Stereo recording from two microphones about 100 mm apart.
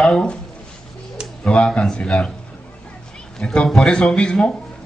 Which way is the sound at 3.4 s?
5° left (ahead or behind).